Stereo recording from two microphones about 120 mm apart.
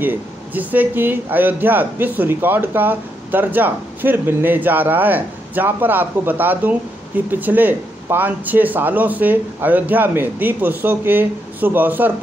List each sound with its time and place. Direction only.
0.0 s speech: 15° right (ahead or behind)